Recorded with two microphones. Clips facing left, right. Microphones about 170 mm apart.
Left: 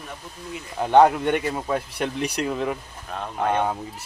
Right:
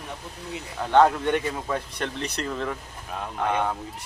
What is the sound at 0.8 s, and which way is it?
Speech, 15° left (ahead or behind).